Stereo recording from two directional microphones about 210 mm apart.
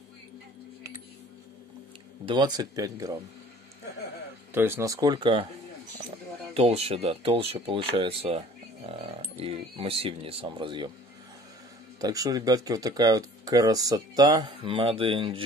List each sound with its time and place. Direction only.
2.2 s speech: 20° right (ahead or behind)
4.6 s speech: 10° right (ahead or behind)
6.5 s speech: 30° right (ahead or behind)
12.0 s speech: 15° right (ahead or behind)